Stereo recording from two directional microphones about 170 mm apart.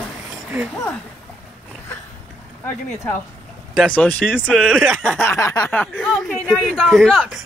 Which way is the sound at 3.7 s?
5° left (ahead or behind).